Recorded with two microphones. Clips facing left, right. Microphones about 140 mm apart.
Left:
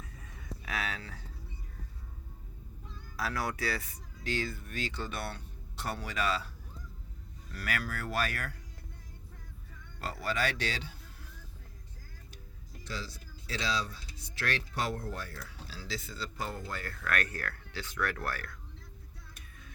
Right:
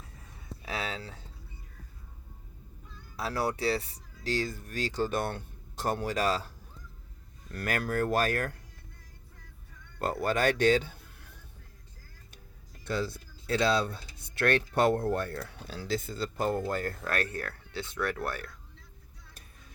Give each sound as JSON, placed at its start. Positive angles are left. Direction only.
{"t": 0.6, "sound": "speech", "side_deg": -30}
{"t": 3.2, "sound": "speech", "side_deg": -30}
{"t": 7.5, "sound": "speech", "side_deg": -50}
{"t": 10.0, "sound": "speech", "side_deg": -50}
{"t": 12.8, "sound": "speech", "side_deg": -55}
{"t": 16.9, "sound": "speech", "side_deg": -30}